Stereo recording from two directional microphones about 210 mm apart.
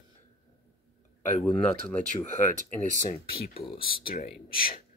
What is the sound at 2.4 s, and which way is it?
Speech, 35° left (ahead or behind).